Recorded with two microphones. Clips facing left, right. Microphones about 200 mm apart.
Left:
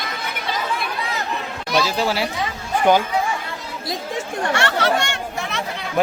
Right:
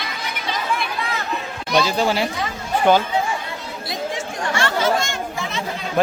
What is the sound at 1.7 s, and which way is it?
A man's voice, 5° left (ahead or behind).